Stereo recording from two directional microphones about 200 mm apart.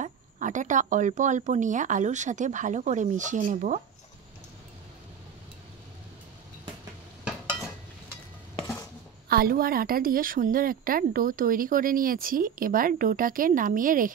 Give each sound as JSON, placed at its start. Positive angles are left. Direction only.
{"t": 0.0, "sound": "speech", "side_deg": -40}
{"t": 8.5, "sound": "a sound", "side_deg": 15}
{"t": 9.3, "sound": "speech", "side_deg": -50}